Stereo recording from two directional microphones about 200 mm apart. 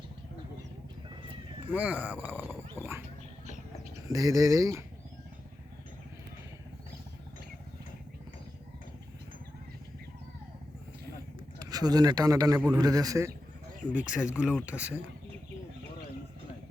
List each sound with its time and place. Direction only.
1.6 s dog: 10° right (ahead or behind)
4.1 s speech: 15° right (ahead or behind)
11.6 s speech: 20° right (ahead or behind)
13.9 s speech: 5° right (ahead or behind)